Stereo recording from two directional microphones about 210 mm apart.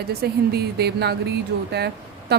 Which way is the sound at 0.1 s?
50° right (ahead or behind).